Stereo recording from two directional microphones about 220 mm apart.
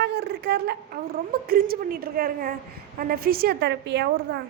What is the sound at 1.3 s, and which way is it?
A woman's voice, 45° right (ahead or behind).